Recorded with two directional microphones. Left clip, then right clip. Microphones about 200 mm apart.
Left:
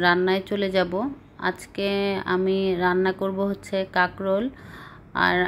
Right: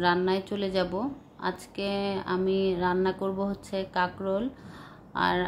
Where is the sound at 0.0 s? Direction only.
15° left (ahead or behind).